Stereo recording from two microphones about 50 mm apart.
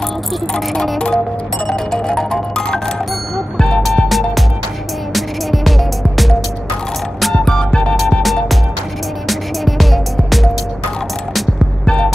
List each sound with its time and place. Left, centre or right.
0.9 s music: centre
7.4 s music: centre
9.3 s music: centre
11.8 s music: centre